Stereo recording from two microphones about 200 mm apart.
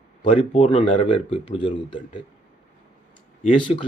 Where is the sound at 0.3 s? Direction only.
35° left (ahead or behind).